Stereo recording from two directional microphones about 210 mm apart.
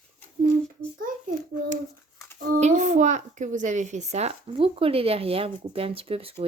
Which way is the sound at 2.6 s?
35° right (ahead or behind).